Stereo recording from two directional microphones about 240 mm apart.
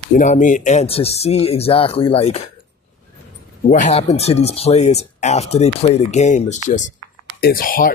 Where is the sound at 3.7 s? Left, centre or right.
Left.